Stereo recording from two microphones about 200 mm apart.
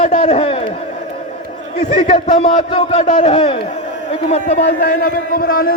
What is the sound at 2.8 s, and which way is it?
Speech, 30° left (ahead or behind).